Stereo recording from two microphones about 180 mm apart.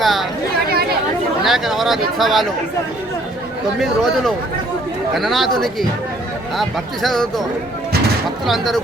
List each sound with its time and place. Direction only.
0.0 s chatter: centre (ahead or behind)
0.7 s chatter: 60° right (ahead or behind)
1.5 s speech: centre (ahead or behind)
3.8 s speech: centre (ahead or behind)
6.6 s speech: centre (ahead or behind)
8.4 s speech: centre (ahead or behind)